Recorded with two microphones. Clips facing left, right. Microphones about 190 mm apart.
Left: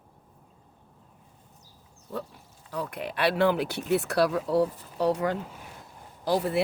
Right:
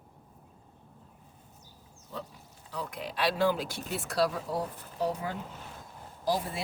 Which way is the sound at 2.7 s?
60° left (ahead or behind).